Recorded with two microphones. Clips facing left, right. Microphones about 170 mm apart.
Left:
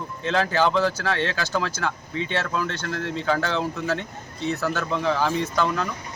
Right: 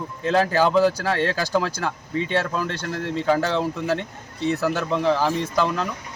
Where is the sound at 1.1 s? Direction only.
35° right (ahead or behind).